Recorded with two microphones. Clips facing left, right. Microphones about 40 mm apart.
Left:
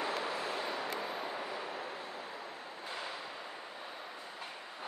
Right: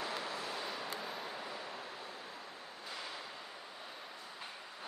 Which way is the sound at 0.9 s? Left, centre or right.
Left.